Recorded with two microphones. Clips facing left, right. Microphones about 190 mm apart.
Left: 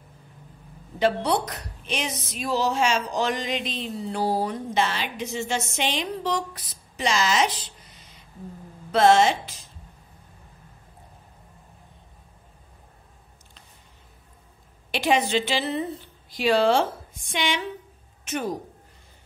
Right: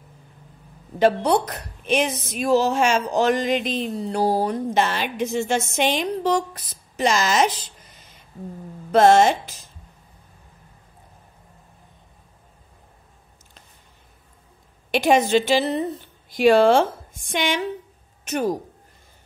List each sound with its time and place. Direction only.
0.9 s speech: 45° right (ahead or behind)
8.9 s speech: 45° right (ahead or behind)
14.9 s a woman's voice: 50° right (ahead or behind)